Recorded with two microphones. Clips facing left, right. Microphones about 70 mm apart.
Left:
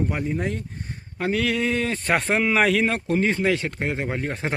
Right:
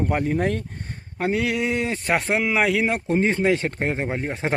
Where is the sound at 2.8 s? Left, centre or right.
Right.